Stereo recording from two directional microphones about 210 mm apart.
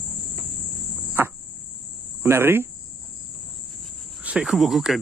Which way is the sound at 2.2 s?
10° right (ahead or behind).